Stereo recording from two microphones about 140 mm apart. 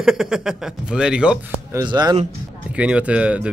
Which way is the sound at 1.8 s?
30° right (ahead or behind).